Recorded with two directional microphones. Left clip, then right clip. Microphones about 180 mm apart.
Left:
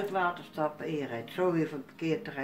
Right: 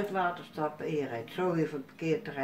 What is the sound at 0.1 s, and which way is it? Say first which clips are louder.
Speech: left 1 dB; 15° left (ahead or behind).